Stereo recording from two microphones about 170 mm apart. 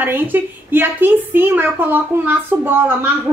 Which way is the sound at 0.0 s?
10° right (ahead or behind).